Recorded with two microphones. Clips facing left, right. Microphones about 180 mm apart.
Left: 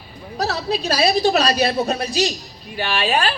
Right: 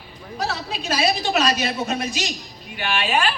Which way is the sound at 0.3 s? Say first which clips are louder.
Left 5 dB; 35° left (ahead or behind).